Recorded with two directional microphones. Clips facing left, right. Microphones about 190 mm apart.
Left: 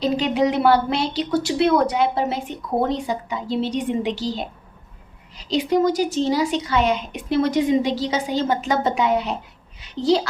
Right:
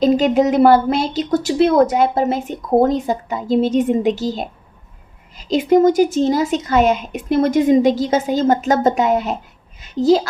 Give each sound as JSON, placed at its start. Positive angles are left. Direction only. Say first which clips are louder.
{"t": 0.0, "sound": "a woman's voice", "louder": "right 6 dB", "side_deg": -45}